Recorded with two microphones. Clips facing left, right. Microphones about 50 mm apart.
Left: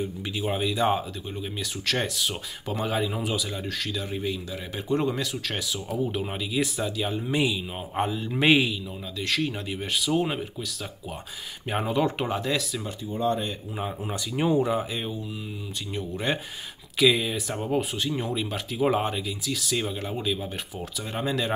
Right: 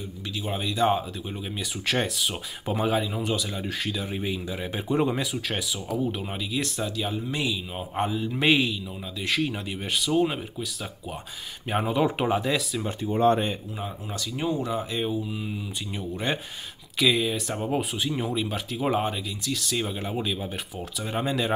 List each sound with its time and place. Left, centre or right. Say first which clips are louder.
0.4 s speech: even; centre
3.6 s speech: right 1 dB; centre
5.9 s speech: left 1 dB; centre
7.3 s a man's voice: left 6 dB; centre
7.7 s speech: even; centre
9.2 s speech: right 1 dB; centre
11.7 s speech: right 1 dB; centre
13.0 s speech: right 5 dB; right
13.7 s speech: left 3 dB; centre
14.8 s speech: right 3 dB; centre